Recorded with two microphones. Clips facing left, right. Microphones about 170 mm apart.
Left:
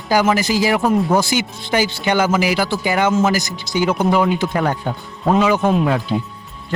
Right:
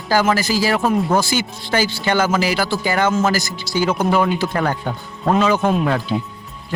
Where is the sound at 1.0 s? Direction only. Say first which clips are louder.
Left 1 dB; centre (ahead or behind).